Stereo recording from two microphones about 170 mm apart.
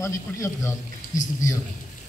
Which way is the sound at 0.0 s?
15° left (ahead or behind).